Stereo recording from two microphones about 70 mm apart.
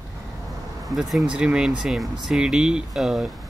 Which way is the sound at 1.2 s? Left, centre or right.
Centre.